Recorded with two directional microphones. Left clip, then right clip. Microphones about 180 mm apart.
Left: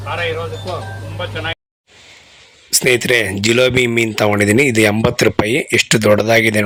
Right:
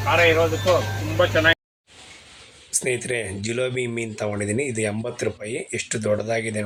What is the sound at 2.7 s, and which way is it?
Speech, 50° left (ahead or behind).